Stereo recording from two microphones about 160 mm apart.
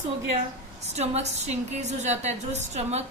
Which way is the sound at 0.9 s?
45° right (ahead or behind).